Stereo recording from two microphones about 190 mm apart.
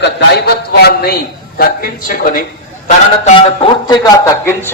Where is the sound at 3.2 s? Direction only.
30° left (ahead or behind).